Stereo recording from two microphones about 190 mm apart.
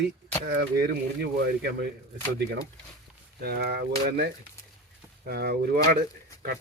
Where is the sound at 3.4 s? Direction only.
55° right (ahead or behind).